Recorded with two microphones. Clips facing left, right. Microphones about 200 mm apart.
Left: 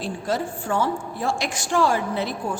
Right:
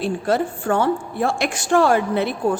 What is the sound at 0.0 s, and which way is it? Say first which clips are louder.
A woman's voice: right 6 dB; 60° right (ahead or behind).